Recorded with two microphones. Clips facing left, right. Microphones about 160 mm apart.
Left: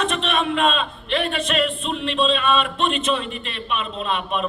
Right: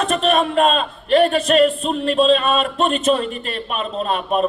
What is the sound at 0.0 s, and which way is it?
A man's voice, 45° right (ahead or behind).